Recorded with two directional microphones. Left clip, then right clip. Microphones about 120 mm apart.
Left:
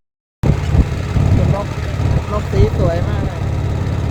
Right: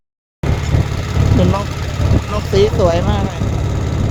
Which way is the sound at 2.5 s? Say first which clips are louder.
Right 6 dB; 80° right.